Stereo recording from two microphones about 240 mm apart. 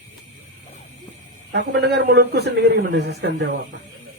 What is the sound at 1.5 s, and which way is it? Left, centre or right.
Speech, right.